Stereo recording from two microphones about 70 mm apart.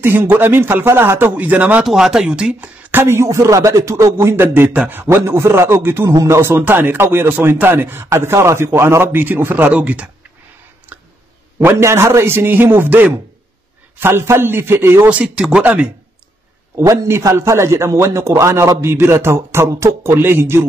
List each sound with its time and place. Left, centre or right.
0.0 s speech: right
1.9 s speech: centre
2.9 s speech: right
5.0 s speech: right
6.0 s speech: right; by 10.0 s centre
10.9 s a sound: right
11.6 s speech: right
15.0 s speech: centre
16.8 s a man's voice: right